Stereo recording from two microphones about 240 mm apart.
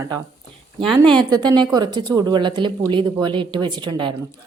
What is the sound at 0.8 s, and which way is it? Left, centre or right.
Speech, centre.